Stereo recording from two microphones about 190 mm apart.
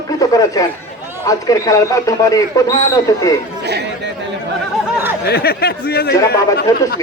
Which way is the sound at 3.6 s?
60° right (ahead or behind).